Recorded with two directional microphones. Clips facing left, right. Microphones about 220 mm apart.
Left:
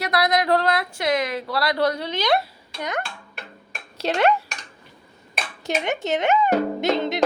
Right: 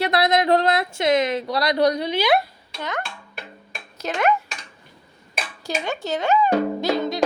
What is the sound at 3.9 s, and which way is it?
Speech, 30° left (ahead or behind).